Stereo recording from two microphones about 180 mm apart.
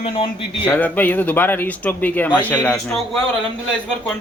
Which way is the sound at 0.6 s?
10° left (ahead or behind).